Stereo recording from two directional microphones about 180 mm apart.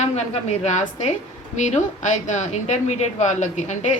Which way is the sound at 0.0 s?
40° left (ahead or behind).